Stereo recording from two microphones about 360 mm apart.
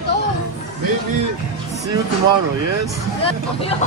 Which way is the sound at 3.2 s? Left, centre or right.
Centre.